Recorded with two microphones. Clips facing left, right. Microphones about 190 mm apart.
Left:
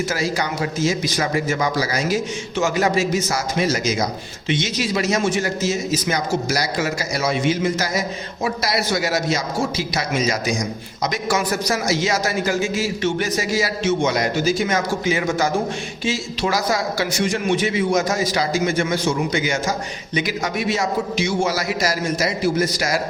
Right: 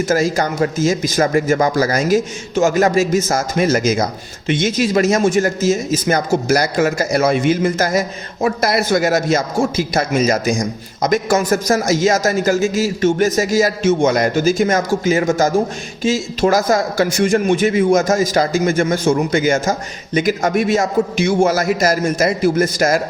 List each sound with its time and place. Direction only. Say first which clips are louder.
0.0 s speech: right 6 dB; 45° right (ahead or behind)